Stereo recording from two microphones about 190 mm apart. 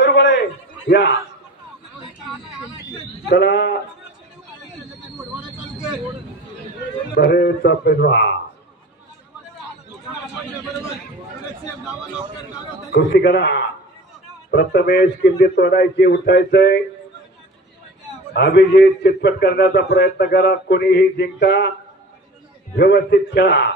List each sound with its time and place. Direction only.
0.0 s a sound: 70° left (ahead or behind)
3.3 s a man's voice: 65° left (ahead or behind)
7.2 s a man's voice: 55° left (ahead or behind)
12.9 s a man's voice: 65° left (ahead or behind)
18.3 s a man's voice: 65° left (ahead or behind)
22.8 s a man's voice: 60° left (ahead or behind)